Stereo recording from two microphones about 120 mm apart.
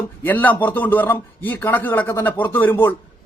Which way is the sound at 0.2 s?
15° left (ahead or behind).